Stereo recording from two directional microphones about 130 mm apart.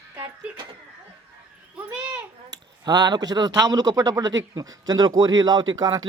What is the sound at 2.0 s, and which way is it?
Speech, 10° right (ahead or behind).